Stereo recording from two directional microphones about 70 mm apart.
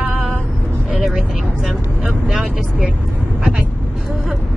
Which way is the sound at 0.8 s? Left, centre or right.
Centre.